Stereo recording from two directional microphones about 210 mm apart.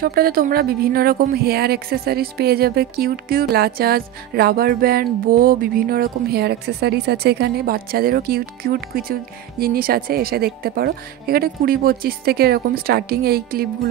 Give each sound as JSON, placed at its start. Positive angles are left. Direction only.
{"t": 0.0, "sound": "a woman's voice", "side_deg": -45}